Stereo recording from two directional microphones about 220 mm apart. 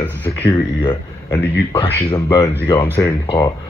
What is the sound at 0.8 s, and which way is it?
A man's voice, 25° left (ahead or behind).